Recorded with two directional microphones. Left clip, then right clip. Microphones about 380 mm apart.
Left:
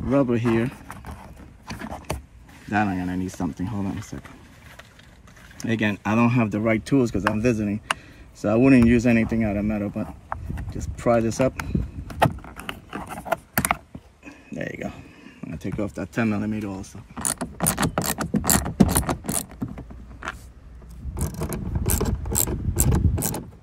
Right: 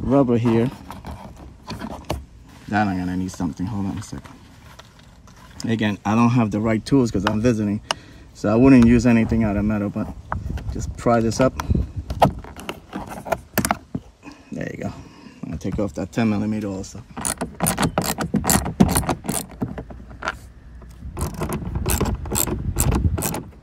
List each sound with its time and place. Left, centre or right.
0.3 s speech: centre
1.7 s vehicle: centre
2.7 s speech: centre
5.6 s speech: centre
12.6 s a sound: centre
14.2 s a sound: centre
21.1 s mechanisms: centre